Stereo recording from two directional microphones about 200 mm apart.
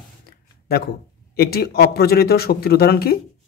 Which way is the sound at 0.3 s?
50° left (ahead or behind).